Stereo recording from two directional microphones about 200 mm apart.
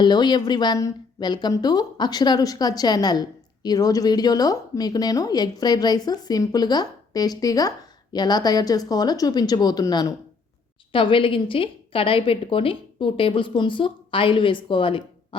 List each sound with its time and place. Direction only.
0.0 s a woman's voice: 20° left (ahead or behind)